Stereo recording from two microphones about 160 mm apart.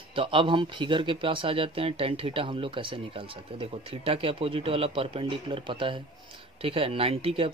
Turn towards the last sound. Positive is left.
turn(degrees=-35)  # may be behind; listen again after turning